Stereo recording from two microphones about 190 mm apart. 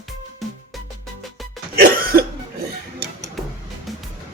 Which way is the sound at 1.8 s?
50° right (ahead or behind).